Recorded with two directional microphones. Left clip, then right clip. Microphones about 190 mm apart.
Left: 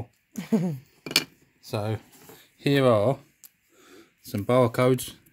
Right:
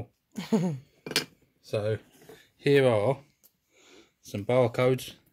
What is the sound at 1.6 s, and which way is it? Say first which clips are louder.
Speech: right 2 dB; 55° left (ahead or behind).